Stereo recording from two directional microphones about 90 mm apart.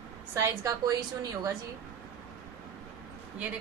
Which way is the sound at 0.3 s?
35° right (ahead or behind).